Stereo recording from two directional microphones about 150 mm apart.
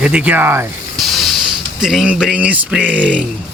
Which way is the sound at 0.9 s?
Centre (ahead or behind).